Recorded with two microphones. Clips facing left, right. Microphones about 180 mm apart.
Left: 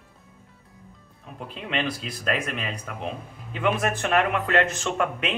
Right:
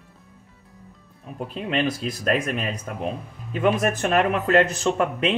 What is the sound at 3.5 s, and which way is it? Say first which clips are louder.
Speech: right 4 dB; 40° right (ahead or behind).